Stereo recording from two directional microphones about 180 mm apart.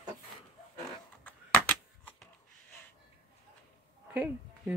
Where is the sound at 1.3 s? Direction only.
10° left (ahead or behind).